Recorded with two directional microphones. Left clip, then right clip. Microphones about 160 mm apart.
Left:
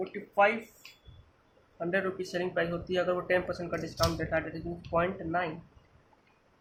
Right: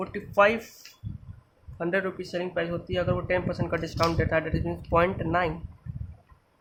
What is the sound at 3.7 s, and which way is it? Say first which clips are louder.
Speech: right 5 dB; 45° right (ahead or behind).